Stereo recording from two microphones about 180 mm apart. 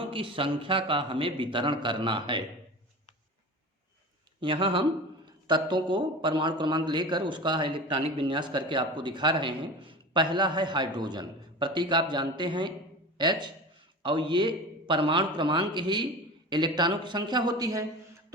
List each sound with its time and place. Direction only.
0.1 s speech: 30° right (ahead or behind)
4.4 s a man's voice: 30° right (ahead or behind)